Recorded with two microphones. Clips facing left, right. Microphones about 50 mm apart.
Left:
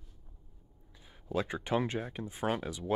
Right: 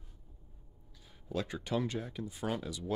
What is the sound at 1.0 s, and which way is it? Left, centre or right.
Speech, centre.